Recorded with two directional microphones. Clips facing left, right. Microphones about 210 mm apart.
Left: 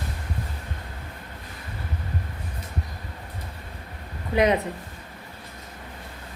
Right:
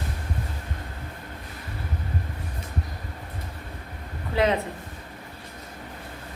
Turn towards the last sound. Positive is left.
turn(degrees=20)  # may be behind; listen again after turning